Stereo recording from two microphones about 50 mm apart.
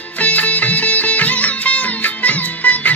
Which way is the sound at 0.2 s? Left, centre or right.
Left.